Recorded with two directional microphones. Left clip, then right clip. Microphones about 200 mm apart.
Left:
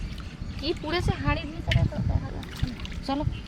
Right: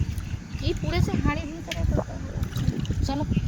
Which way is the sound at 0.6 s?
5° left (ahead or behind).